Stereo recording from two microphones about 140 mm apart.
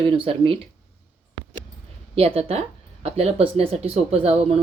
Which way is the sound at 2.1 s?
45° right (ahead or behind).